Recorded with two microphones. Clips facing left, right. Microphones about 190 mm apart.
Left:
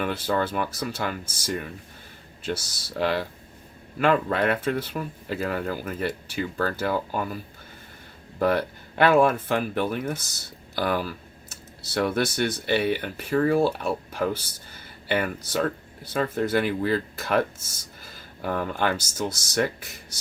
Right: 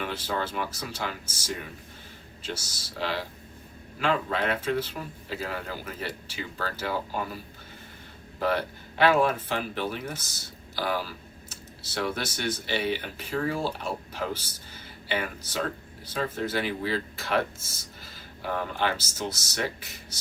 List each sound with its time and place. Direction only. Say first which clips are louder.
0.0 s speech: left 5 dB; 55° left (ahead or behind)
8.4 s speech: left 4 dB; 50° left (ahead or behind)